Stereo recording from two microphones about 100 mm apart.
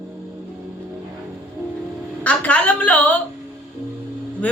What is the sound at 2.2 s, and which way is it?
Speech, 15° left (ahead or behind).